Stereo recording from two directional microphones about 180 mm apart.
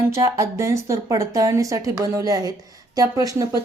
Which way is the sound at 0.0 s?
15° right (ahead or behind).